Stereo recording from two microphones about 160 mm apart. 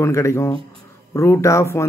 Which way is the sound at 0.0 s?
20° left (ahead or behind).